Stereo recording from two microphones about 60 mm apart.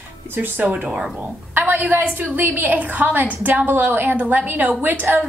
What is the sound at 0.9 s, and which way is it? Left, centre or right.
Speech, centre.